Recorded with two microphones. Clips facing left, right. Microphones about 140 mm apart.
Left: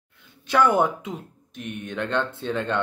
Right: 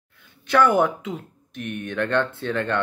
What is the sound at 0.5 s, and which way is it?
Speech, 20° left (ahead or behind).